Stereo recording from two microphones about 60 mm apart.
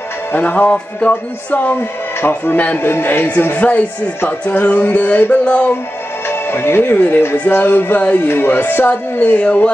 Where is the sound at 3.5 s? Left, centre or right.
Left.